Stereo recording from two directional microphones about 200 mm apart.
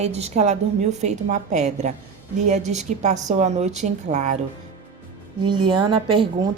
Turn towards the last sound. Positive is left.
turn(degrees=-25)  # may be behind; listen again after turning